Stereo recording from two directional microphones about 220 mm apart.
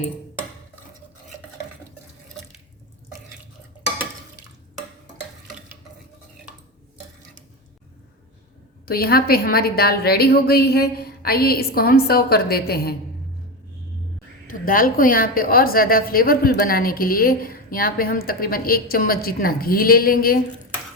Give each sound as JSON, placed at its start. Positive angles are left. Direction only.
{"t": 8.9, "sound": "a woman's voice", "side_deg": 45}
{"t": 14.4, "sound": "a woman's voice", "side_deg": 40}